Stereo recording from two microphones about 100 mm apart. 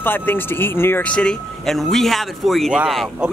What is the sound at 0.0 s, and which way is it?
Speech, 20° left (ahead or behind).